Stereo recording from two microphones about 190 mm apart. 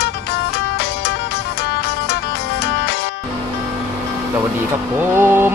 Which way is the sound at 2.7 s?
60° left (ahead or behind).